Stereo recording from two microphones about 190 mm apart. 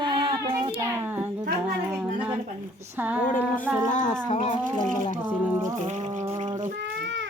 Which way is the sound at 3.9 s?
40° left (ahead or behind).